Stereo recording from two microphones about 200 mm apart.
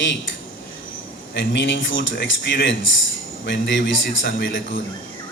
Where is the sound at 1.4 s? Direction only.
65° left (ahead or behind).